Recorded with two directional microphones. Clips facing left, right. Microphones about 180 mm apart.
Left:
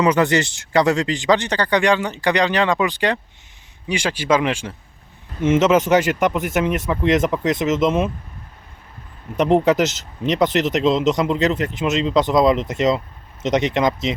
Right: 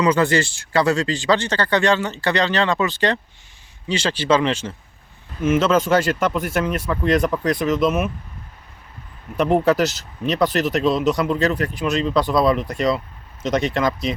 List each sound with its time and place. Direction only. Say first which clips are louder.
0.0 s speech: left 1 dB; 20° left (ahead or behind)
5.4 s speech: left 2 dB; 20° left (ahead or behind)
9.4 s speech: left 1 dB; 20° left (ahead or behind)